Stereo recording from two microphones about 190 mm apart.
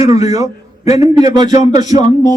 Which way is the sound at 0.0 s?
20° right (ahead or behind).